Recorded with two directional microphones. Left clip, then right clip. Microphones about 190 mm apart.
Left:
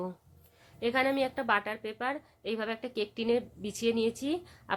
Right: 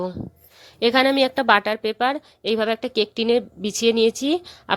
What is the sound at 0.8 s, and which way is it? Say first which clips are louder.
A woman's voice: right 11 dB; 50° right (ahead or behind).